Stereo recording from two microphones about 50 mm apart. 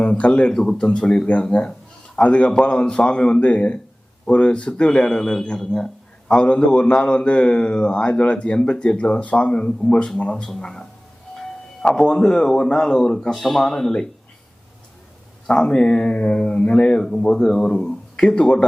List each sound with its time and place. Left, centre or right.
0.0 s speech: left
0.5 s a man's voice: centre
5.7 s a sound: centre
6.4 s a man's voice: left
11.9 s speech: centre
15.4 s speech: centre